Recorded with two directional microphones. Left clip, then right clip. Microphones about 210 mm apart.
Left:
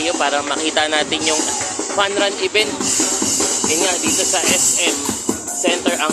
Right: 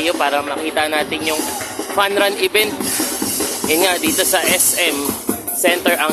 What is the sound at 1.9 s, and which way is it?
Speech, 15° right (ahead or behind).